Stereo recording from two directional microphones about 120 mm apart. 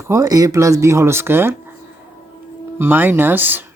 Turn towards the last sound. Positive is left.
turn(degrees=-15)  # may be behind; listen again after turning